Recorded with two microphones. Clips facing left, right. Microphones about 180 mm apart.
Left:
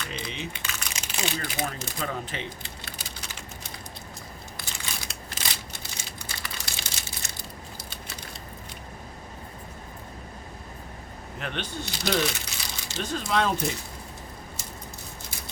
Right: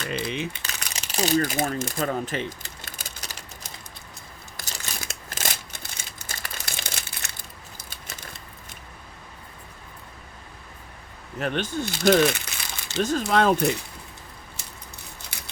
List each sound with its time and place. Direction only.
0.1 s speech: 55° right (ahead or behind)
0.6 s crumpling: 35° right (ahead or behind); by 7.3 s 60° right (ahead or behind)
7.8 s a sound: 50° right (ahead or behind)
11.3 s speech: 45° right (ahead or behind)
13.2 s speech: 55° right (ahead or behind)
15.3 s scissors: 65° right (ahead or behind)